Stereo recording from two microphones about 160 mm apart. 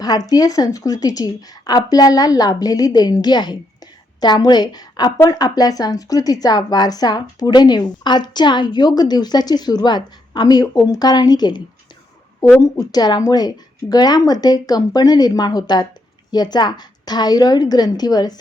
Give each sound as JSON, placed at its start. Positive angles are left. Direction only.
{"t": 0.0, "sound": "speech", "side_deg": 25}